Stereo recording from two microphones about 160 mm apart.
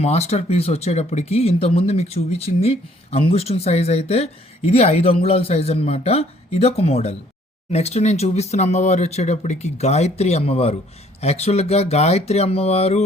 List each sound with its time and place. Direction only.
0.0 s speech: 40° left (ahead or behind)